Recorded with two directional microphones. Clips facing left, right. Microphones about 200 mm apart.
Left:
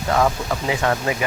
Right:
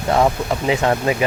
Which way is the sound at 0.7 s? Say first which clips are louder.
Right 4 dB; 20° right (ahead or behind).